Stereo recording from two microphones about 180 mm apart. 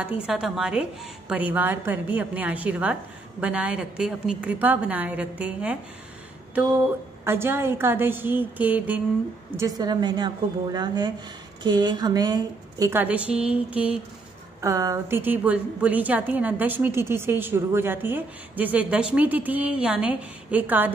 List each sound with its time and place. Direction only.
0.0 s a woman's voice: 5° right (ahead or behind)
7.2 s a woman's voice: 15° right (ahead or behind)
9.6 s a woman's voice: 20° right (ahead or behind)